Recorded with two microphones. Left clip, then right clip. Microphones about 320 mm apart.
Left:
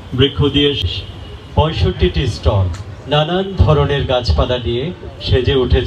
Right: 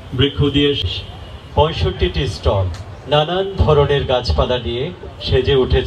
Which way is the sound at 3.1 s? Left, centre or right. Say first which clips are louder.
Even; right.